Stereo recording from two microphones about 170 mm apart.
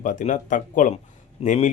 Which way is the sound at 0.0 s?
50° left (ahead or behind).